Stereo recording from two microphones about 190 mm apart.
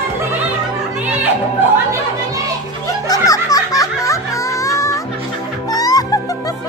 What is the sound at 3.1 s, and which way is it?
Music, 20° left (ahead or behind).